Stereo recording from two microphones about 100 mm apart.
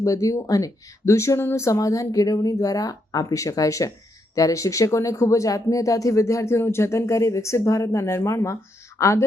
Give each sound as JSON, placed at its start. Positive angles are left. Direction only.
{"t": 0.0, "sound": "speech", "side_deg": 35}